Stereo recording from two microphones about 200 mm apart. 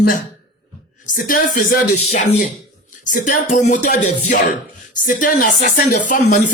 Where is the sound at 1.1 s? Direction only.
45° left (ahead or behind).